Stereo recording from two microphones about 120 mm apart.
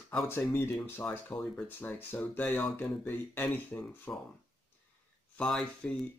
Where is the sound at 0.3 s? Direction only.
20° left (ahead or behind).